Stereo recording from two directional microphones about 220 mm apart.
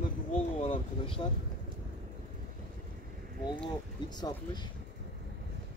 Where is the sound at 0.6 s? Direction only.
25° left (ahead or behind).